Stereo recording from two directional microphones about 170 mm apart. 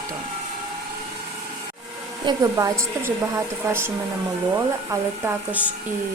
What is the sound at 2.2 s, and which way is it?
A woman's voice, 20° right (ahead or behind).